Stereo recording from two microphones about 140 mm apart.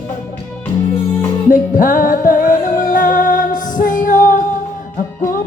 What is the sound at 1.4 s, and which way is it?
Music, 75° left (ahead or behind).